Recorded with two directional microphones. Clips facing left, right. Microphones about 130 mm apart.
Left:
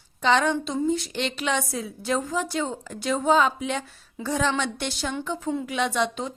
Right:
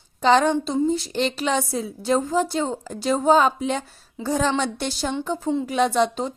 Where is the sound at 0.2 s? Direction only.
35° right (ahead or behind).